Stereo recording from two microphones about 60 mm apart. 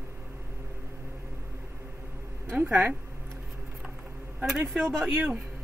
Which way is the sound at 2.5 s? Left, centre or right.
Right.